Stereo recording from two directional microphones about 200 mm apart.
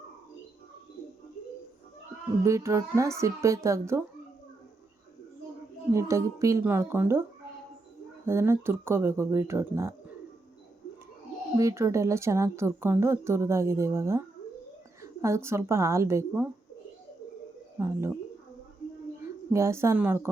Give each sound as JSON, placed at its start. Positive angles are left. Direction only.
{"t": 2.4, "sound": "a woman's voice", "side_deg": -15}
{"t": 5.9, "sound": "a woman's voice", "side_deg": -15}
{"t": 8.3, "sound": "a woman's voice", "side_deg": -10}
{"t": 11.5, "sound": "a woman's voice", "side_deg": -15}
{"t": 17.7, "sound": "a woman's voice", "side_deg": -10}
{"t": 19.5, "sound": "a woman's voice", "side_deg": -15}